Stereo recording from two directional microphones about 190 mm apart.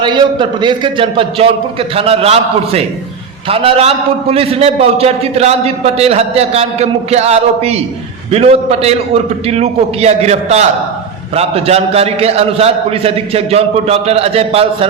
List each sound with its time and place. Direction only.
0.0 s a man's voice: 25° right (ahead or behind)